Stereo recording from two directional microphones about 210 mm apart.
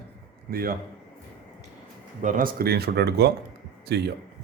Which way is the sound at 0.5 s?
45° right (ahead or behind).